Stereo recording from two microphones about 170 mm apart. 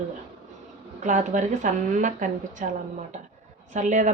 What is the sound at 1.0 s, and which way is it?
A woman's voice, 45° right (ahead or behind).